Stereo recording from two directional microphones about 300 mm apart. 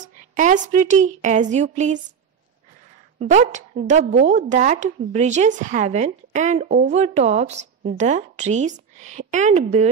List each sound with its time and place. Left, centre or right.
0.0 s a woman's voice: right
3.2 s a woman's voice: right